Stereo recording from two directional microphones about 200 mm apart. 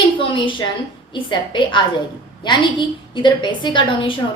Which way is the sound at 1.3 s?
25° left (ahead or behind).